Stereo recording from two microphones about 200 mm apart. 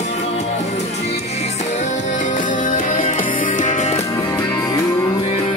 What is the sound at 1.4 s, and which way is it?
Music, 35° left (ahead or behind).